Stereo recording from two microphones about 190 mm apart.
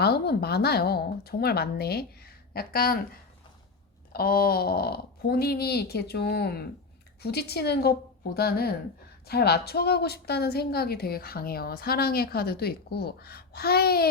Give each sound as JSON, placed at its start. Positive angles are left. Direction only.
{"t": 0.0, "sound": "a woman's voice", "side_deg": 55}
{"t": 4.1, "sound": "a woman's voice", "side_deg": 55}